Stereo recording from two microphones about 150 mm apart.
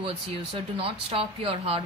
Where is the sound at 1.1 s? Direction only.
40° right (ahead or behind).